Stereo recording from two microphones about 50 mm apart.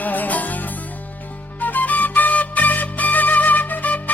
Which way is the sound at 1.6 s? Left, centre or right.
Left.